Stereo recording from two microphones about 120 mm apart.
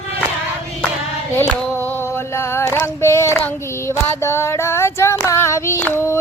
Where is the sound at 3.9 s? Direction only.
20° left (ahead or behind).